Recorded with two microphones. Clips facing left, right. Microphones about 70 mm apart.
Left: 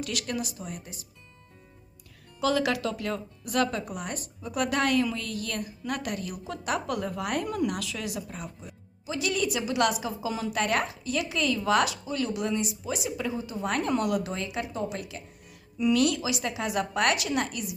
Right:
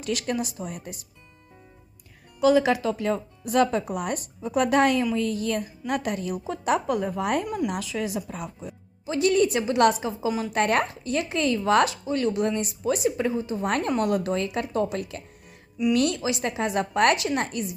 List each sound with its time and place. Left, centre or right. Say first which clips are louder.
0.1 s a woman's voice: right 5 dB; right
2.4 s speech: right 7 dB; centre
2.6 s speech: right 5 dB; right
6.8 s speech: right 5 dB; right
7.4 s speech: right 1 dB; centre
7.8 s speech: right 5 dB; right
10.2 s speech: right 5 dB; right
10.5 s a woman's voice: right 4 dB; right
15.8 s speech: right 1 dB; centre
16.2 s speech: right 4 dB; right